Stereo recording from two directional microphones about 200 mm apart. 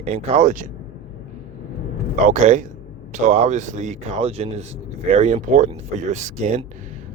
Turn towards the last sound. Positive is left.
turn(degrees=-35)  # may be behind; listen again after turning